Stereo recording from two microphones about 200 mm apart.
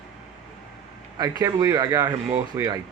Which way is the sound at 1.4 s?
15° right (ahead or behind).